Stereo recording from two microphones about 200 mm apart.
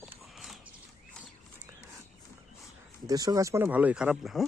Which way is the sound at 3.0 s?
20° right (ahead or behind).